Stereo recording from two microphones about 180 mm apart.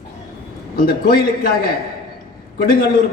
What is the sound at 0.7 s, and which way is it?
A man's voice, 55° left (ahead or behind).